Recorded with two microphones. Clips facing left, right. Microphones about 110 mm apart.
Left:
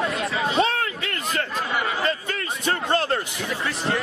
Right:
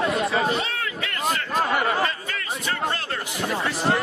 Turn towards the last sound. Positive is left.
turn(degrees=35)  # may be behind; listen again after turning